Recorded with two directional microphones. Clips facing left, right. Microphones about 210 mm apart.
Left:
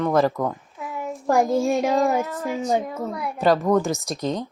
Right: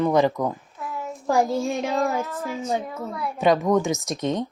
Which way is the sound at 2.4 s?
15° left (ahead or behind).